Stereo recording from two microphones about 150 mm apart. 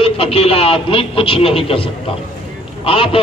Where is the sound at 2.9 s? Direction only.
40° left (ahead or behind).